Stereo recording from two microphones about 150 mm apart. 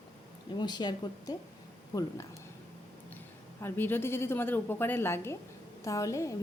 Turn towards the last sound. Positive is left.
turn(degrees=20)  # may be behind; listen again after turning